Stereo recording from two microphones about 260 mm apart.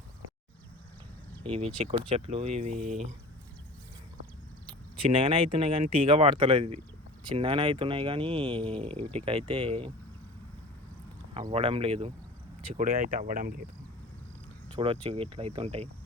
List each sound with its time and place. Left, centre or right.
1.8 s speech: right
5.0 s speech: right
8.6 s speech: centre
9.1 s speech: centre
11.3 s speech: right
14.8 s speech: centre